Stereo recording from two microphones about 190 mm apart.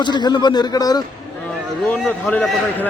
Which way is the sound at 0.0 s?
25° left (ahead or behind).